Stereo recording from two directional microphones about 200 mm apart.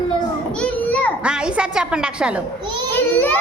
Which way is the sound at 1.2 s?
5° right (ahead or behind).